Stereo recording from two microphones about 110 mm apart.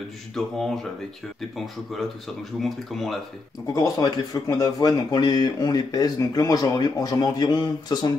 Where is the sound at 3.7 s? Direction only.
35° left (ahead or behind).